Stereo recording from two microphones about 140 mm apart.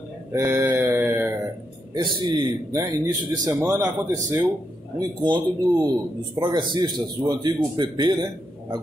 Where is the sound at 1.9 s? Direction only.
35° right (ahead or behind).